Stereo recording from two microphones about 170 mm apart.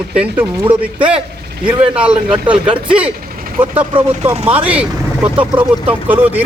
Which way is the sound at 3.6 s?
10° right (ahead or behind).